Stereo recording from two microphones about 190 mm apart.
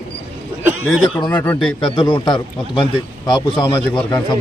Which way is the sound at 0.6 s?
5° right (ahead or behind).